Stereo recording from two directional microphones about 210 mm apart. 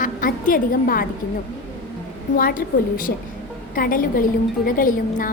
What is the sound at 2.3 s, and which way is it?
A woman's voice, 40° left (ahead or behind).